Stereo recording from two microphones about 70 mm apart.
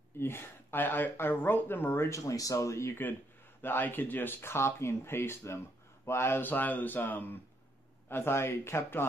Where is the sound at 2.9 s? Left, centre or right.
Left.